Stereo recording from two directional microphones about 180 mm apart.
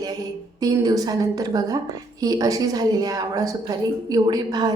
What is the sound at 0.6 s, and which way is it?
A woman's voice, 20° right (ahead or behind).